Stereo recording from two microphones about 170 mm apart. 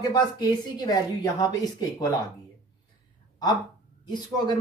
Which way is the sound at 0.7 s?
25° left (ahead or behind).